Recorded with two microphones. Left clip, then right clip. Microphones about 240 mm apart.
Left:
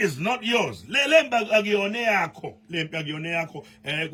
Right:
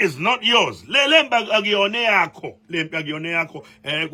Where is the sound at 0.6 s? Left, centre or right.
Centre.